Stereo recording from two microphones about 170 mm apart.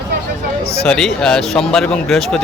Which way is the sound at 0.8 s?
5° left (ahead or behind).